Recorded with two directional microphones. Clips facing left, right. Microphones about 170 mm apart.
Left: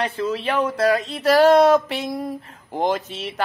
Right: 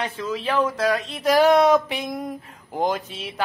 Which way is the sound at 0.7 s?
Centre (ahead or behind).